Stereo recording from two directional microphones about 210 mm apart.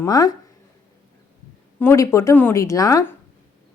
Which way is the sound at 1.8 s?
10° left (ahead or behind).